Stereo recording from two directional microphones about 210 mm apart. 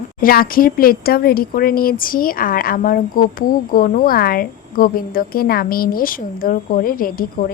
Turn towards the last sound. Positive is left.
turn(degrees=40)  # may be behind; listen again after turning